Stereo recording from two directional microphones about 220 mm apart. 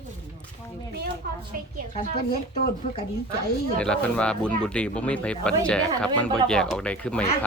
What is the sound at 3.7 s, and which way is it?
Speech, 5° left (ahead or behind).